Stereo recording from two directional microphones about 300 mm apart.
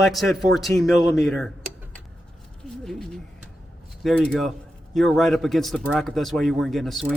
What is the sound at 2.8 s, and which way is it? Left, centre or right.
A man's voice, centre.